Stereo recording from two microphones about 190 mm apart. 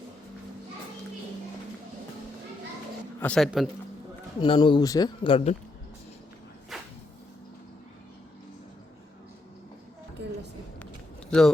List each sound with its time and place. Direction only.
3.2 s speech: 5° left (ahead or behind)
4.4 s speech: 25° left (ahead or behind)
6.7 s cupboard open or close: centre (ahead or behind)
11.3 s speech: 5° left (ahead or behind)